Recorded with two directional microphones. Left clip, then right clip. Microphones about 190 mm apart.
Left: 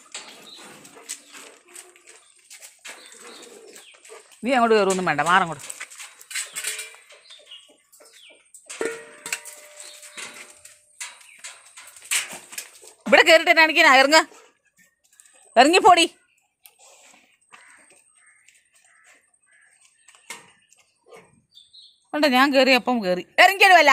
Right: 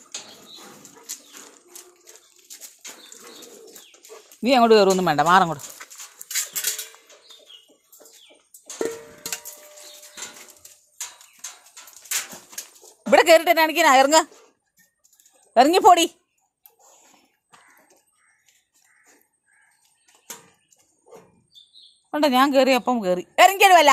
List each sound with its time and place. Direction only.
4.2 s speech: 30° right (ahead or behind)
8.8 s cowbell: 40° right (ahead or behind)
13.1 s a woman's voice: 10° right (ahead or behind)
15.5 s speech: 5° right (ahead or behind)
22.1 s a woman's voice: centre (ahead or behind)